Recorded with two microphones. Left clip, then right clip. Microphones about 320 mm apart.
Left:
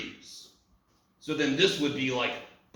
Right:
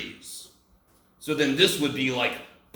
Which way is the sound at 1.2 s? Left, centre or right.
Right.